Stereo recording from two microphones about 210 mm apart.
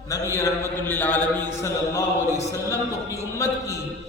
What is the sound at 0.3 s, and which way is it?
Speech, 10° left (ahead or behind).